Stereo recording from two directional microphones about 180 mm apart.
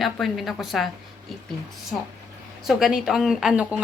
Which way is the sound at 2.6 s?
Centre (ahead or behind).